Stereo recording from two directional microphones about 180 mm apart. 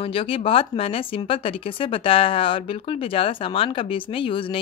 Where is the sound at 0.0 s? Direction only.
30° left (ahead or behind).